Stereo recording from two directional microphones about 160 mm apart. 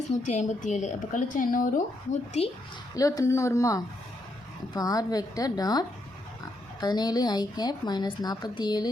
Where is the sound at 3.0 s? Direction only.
20° left (ahead or behind).